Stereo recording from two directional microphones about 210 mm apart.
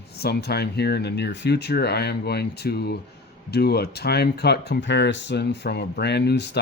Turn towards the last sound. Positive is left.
turn(degrees=55)  # may be behind; listen again after turning